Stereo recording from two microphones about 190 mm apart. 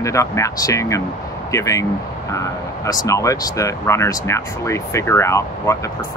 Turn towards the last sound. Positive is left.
turn(degrees=15)  # may be behind; listen again after turning